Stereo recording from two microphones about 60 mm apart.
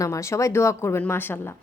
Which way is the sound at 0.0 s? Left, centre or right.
Left.